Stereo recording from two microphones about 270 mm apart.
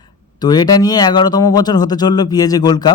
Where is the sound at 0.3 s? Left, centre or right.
Centre.